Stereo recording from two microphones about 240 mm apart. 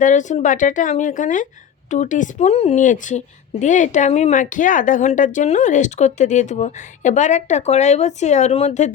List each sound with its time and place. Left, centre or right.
0.0 s a woman's voice: left